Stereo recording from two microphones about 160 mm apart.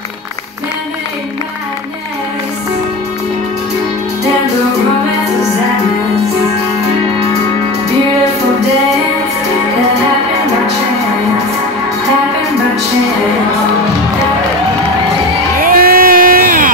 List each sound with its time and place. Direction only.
15.6 s crowd: 65° right (ahead or behind)